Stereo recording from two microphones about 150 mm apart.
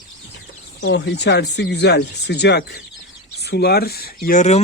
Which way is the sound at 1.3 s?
90° left.